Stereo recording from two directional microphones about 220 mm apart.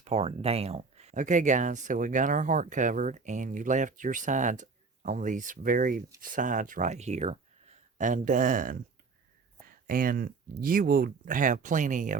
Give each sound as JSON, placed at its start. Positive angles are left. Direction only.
{"t": 0.0, "sound": "speech", "side_deg": -30}